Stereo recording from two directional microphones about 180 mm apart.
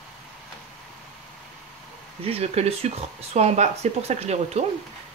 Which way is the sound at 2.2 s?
35° right (ahead or behind).